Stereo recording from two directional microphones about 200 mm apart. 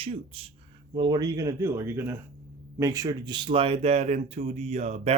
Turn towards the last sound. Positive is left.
turn(degrees=-30)  # may be behind; listen again after turning